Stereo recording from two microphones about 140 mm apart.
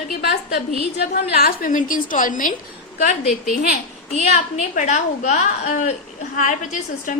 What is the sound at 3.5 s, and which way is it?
A woman's voice, 55° left (ahead or behind).